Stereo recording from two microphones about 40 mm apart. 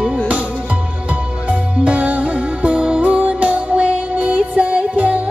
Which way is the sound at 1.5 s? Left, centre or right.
Right.